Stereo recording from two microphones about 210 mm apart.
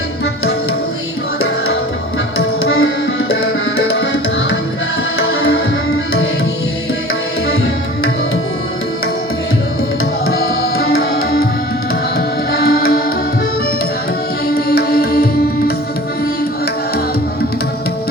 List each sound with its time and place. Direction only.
2.6 s tabla: 75° left (ahead or behind)
10.3 s tabla: 45° left (ahead or behind)
10.9 s music: 45° left (ahead or behind)
12.5 s music: 45° left (ahead or behind)
14.7 s music: 45° left (ahead or behind)